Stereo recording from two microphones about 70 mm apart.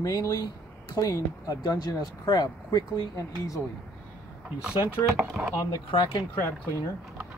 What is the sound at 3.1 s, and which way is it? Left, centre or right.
Speech, left.